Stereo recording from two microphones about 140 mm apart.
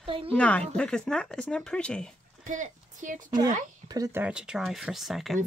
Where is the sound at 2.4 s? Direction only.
65° right (ahead or behind).